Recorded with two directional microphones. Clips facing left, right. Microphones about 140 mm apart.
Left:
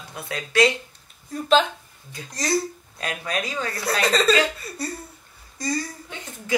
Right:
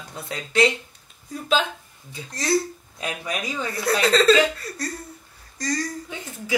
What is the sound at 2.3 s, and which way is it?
Speech, 5° right (ahead or behind).